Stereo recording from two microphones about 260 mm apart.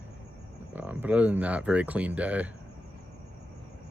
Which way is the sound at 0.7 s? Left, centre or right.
Centre.